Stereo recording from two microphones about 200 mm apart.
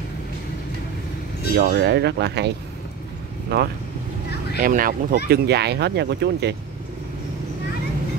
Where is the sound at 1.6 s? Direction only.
55° right (ahead or behind).